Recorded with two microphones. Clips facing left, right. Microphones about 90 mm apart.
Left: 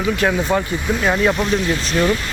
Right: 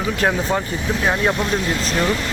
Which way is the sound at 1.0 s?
20° right (ahead or behind).